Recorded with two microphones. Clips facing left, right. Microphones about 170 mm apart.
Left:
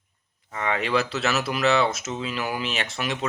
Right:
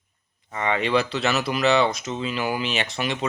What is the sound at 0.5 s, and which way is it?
Speech, centre (ahead or behind).